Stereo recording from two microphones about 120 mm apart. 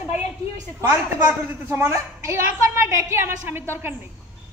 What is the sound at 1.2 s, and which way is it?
A woman's voice, 20° right (ahead or behind).